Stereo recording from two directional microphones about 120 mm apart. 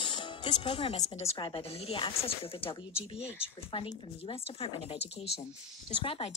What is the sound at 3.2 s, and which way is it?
Speech, 10° right (ahead or behind).